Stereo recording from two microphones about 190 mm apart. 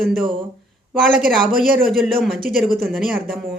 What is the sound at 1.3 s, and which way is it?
Speech, centre (ahead or behind).